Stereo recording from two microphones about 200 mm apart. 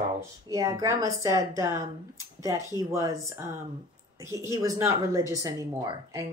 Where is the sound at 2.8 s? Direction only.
15° right (ahead or behind).